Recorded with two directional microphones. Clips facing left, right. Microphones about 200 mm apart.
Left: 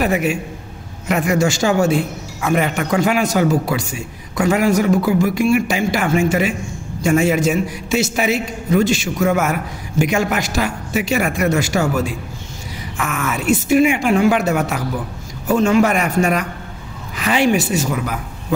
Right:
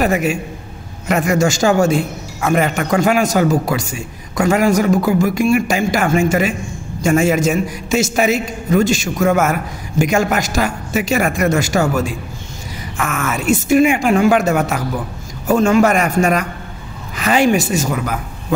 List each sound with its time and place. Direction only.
0.0 s a man's voice: 45° right (ahead or behind)